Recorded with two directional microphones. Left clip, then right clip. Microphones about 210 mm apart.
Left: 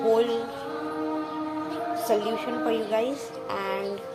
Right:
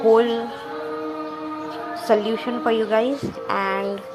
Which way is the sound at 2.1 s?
15° right (ahead or behind).